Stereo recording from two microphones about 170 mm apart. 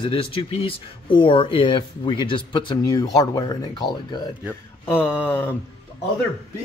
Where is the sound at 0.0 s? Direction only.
30° left (ahead or behind).